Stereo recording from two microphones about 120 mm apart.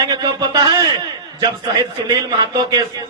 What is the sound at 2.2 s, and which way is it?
Speech, 30° right (ahead or behind).